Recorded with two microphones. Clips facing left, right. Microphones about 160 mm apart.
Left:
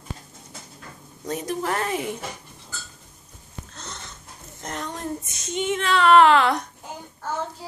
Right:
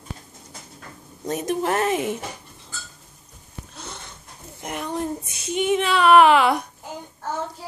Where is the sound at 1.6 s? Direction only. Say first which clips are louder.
Right 5 dB; 20° right (ahead or behind).